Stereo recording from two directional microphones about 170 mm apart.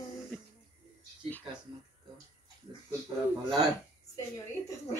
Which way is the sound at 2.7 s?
25° right (ahead or behind).